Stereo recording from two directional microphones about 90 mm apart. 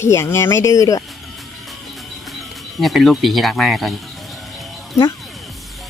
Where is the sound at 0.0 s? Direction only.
30° left (ahead or behind).